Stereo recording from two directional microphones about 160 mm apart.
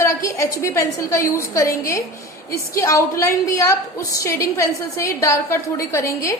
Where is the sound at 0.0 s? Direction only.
20° left (ahead or behind).